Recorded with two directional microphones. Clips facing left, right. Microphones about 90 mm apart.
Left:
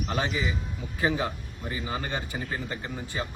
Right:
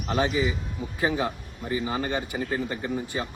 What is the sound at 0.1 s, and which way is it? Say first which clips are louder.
Speech: right 6 dB; 25° right (ahead or behind).